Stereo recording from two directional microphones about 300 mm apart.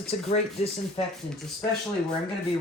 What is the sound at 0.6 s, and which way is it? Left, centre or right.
Speech, left.